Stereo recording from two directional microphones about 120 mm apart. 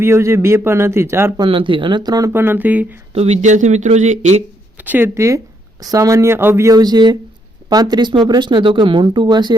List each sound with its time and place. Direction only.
0.0 s a man's voice: 25° right (ahead or behind)
1.4 s speech: 45° right (ahead or behind)
2.3 s speech: 20° right (ahead or behind)
3.2 s speech: 70° right (ahead or behind)
4.8 s a man's voice: 15° right (ahead or behind)
6.7 s speech: 35° right (ahead or behind)